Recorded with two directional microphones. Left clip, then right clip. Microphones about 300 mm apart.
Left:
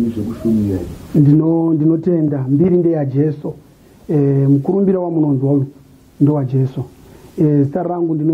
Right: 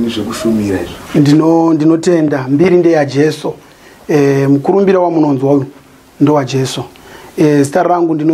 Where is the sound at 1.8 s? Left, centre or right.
Centre.